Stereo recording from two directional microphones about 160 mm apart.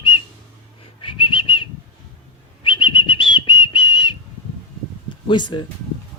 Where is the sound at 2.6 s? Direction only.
30° left (ahead or behind).